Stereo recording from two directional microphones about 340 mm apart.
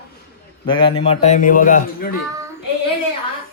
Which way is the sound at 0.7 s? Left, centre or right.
Centre.